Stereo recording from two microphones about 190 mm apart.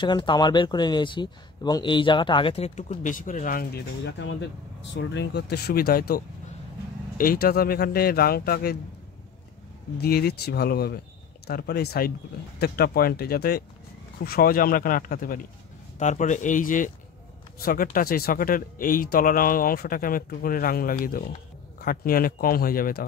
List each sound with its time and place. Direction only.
0.0 s speech: 25° left (ahead or behind); by 3.8 s 45° left (ahead or behind)
4.0 s speech: 70° left (ahead or behind); by 8.7 s 55° left (ahead or behind)
9.9 s speech: 55° left (ahead or behind)